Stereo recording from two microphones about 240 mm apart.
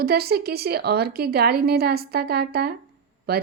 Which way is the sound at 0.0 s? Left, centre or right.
Right.